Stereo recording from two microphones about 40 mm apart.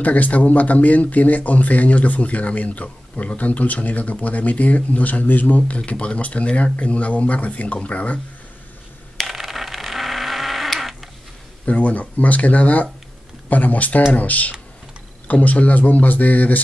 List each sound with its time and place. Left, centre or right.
0.0 s speech: left
5.9 s speech: left
9.3 s sheep: centre
11.6 s speech: left